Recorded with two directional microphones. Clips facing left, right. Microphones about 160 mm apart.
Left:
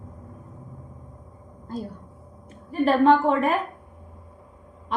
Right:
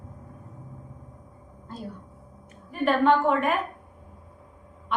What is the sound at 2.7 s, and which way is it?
Speech, 35° left (ahead or behind).